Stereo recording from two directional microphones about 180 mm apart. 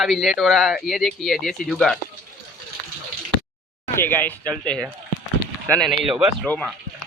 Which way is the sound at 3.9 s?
10° left (ahead or behind).